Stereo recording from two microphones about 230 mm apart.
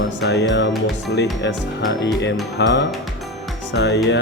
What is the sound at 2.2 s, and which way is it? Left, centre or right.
Speech, left.